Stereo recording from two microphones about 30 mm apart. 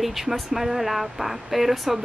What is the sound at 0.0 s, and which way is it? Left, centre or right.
A woman's voice, centre.